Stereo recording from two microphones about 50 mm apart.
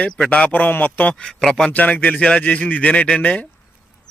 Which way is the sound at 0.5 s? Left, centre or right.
Left.